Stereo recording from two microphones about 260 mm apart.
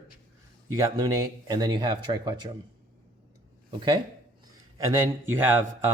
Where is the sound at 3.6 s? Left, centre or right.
Centre.